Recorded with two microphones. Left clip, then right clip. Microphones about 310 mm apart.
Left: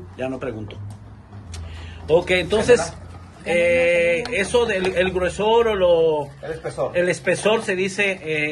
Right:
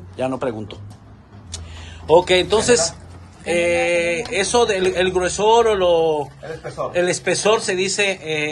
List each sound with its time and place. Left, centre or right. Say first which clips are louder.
0.2 s speech: right 5 dB; centre
2.0 s speech: right 4 dB; centre